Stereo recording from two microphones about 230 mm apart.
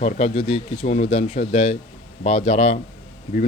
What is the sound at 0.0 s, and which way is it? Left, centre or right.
Speech, left.